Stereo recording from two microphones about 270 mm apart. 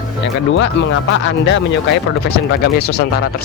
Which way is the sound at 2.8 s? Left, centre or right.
Left.